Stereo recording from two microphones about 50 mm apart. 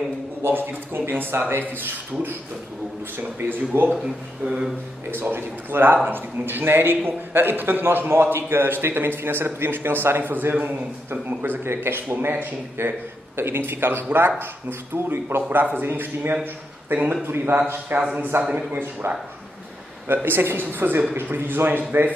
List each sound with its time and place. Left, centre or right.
0.4 s a man's voice: right
3.2 s speech: right
5.2 s a man's voice: right
18.3 s a man's voice: right
18.7 s speech: right
20.2 s a man's voice: right